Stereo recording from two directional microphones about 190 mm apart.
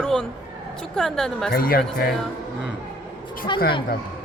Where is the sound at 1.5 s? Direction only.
50° left (ahead or behind).